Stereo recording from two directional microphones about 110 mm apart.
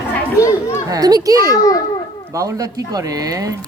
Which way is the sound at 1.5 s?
35° left (ahead or behind).